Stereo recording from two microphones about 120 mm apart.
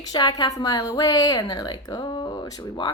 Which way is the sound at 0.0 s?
35° left (ahead or behind).